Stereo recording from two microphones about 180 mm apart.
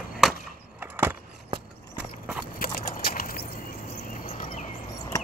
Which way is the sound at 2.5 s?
55° left (ahead or behind).